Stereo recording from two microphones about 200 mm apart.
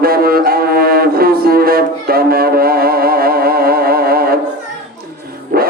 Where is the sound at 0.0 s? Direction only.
50° right (ahead or behind).